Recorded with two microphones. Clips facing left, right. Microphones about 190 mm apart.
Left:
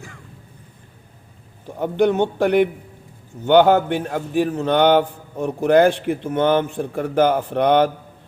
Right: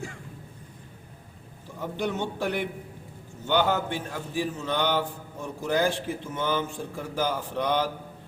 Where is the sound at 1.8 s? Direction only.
65° left (ahead or behind).